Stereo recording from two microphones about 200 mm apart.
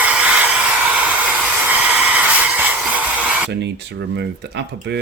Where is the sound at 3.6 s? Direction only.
60° right (ahead or behind).